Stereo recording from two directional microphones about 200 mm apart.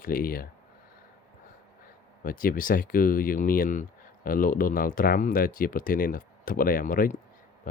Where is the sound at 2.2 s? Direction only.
45° left (ahead or behind).